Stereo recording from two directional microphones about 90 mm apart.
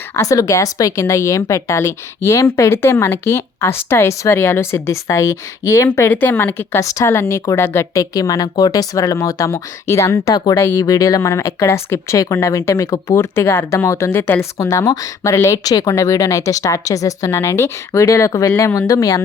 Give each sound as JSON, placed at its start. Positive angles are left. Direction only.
{"t": 0.2, "sound": "a woman's voice", "side_deg": 40}
{"t": 6.1, "sound": "a woman's voice", "side_deg": 20}
{"t": 8.1, "sound": "a woman's voice", "side_deg": 40}
{"t": 14.6, "sound": "a woman's voice", "side_deg": 35}